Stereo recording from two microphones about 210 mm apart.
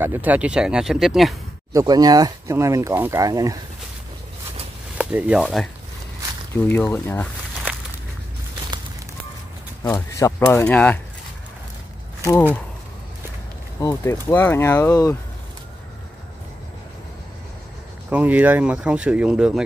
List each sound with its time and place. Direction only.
0.0 s speech: 10° right (ahead or behind)
1.7 s speech: 15° right (ahead or behind)
4.9 s speech: 5° right (ahead or behind)
6.7 s speech: 10° left (ahead or behind)
9.8 s speech: 10° left (ahead or behind)
12.2 s speech: 15° left (ahead or behind)
13.7 s speech: 15° left (ahead or behind)
18.1 s speech: 5° right (ahead or behind)